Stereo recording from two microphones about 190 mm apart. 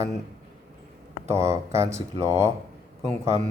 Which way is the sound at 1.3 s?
15° right (ahead or behind).